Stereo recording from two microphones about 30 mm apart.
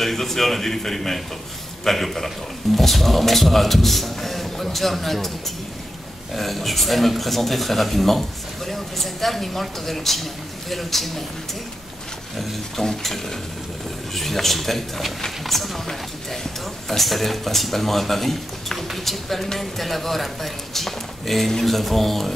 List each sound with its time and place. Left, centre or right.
0.0 s a man's voice: centre
6.3 s a man's voice: centre
12.8 s a man's voice: centre
16.9 s a man's voice: centre